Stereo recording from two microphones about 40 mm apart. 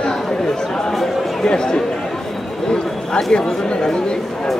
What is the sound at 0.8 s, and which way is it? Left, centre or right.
Speech, centre.